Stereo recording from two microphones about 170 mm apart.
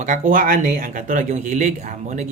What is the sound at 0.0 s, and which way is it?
Speech, 50° right (ahead or behind).